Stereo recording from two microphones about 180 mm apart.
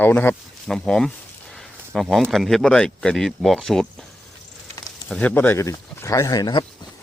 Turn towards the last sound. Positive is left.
turn(degrees=20)  # may be behind; listen again after turning